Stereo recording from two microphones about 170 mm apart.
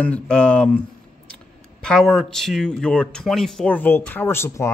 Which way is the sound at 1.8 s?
Centre (ahead or behind).